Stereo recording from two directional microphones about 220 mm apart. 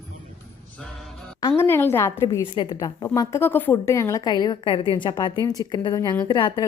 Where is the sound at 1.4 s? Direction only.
15° left (ahead or behind).